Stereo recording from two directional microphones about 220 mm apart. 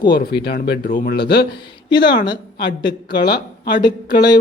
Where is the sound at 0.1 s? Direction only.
45° left (ahead or behind).